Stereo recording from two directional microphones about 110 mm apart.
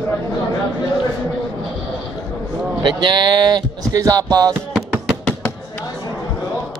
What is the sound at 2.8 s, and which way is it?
Speech, 45° right (ahead or behind).